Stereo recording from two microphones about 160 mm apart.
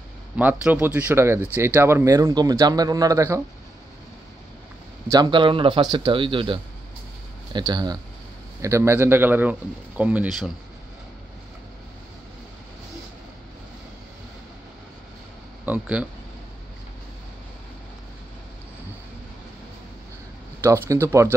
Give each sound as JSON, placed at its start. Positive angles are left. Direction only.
{"t": 0.4, "sound": "speech", "side_deg": -10}
{"t": 5.1, "sound": "speech", "side_deg": -30}
{"t": 15.6, "sound": "speech", "side_deg": -10}
{"t": 20.6, "sound": "speech", "side_deg": -15}